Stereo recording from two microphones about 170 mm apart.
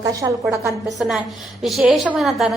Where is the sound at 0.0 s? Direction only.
20° right (ahead or behind).